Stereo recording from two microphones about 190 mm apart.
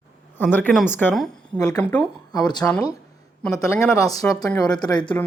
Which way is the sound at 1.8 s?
5° left (ahead or behind).